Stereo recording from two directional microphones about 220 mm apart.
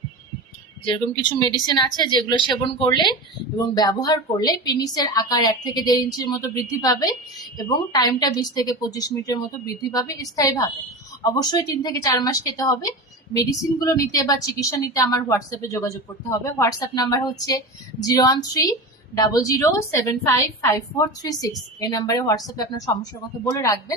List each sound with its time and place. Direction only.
0.9 s a woman's voice: 20° left (ahead or behind)